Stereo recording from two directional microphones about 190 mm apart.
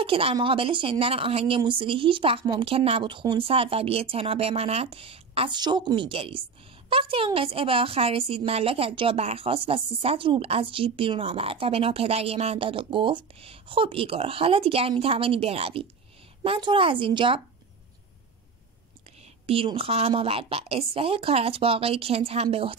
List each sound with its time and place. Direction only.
0.0 s a woman's voice: 30° right (ahead or behind)
19.4 s a woman's voice: 30° right (ahead or behind)